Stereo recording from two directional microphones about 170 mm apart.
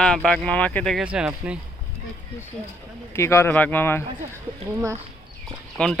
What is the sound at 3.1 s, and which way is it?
Speech, 15° left (ahead or behind).